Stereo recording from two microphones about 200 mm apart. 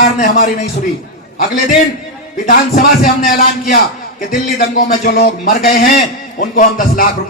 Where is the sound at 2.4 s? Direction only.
45° left (ahead or behind).